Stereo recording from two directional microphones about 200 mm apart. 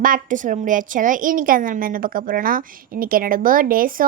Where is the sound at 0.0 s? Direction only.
40° right (ahead or behind).